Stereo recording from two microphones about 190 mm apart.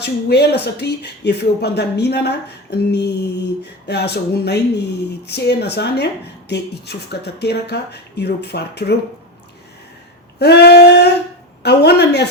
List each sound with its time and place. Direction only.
0.0 s speech: 60° left (ahead or behind)
10.3 s speech: 60° left (ahead or behind)